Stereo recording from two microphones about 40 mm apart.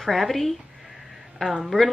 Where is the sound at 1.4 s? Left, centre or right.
Centre.